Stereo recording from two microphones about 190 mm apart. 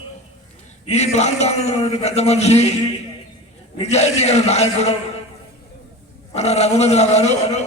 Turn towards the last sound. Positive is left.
turn(degrees=35)  # may be behind; listen again after turning